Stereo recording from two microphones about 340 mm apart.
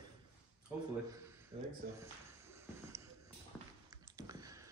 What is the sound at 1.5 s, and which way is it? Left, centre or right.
Speech, centre.